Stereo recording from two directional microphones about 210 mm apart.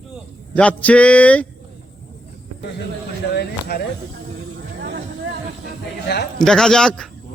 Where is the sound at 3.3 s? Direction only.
50° left (ahead or behind).